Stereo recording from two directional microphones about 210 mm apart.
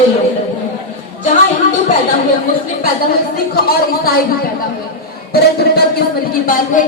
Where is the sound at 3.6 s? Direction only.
45° left (ahead or behind).